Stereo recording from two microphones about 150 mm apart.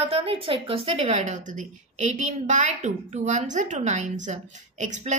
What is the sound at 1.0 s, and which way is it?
A woman's voice, 50° right (ahead or behind).